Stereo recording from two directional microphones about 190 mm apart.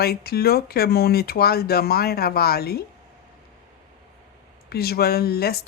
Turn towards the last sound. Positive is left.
turn(degrees=55)  # may be behind; listen again after turning